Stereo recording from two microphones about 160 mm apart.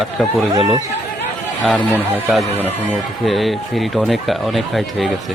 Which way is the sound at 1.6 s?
5° left (ahead or behind).